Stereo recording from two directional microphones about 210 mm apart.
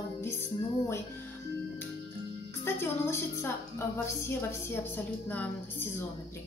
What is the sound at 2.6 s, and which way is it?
A woman's voice, 10° left (ahead or behind).